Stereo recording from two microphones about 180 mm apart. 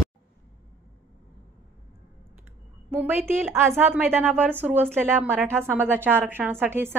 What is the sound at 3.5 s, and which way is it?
A woman's voice, 15° right (ahead or behind).